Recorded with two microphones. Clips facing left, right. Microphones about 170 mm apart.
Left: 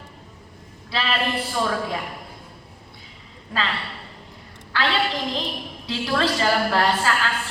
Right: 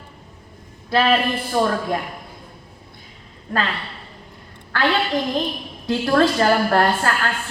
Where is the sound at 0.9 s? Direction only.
50° right (ahead or behind).